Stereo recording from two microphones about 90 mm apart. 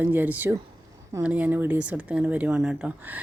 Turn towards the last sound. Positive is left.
turn(degrees=-10)  # may be behind; listen again after turning